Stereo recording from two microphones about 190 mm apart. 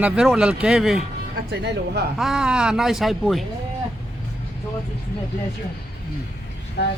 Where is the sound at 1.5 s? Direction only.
60° right (ahead or behind).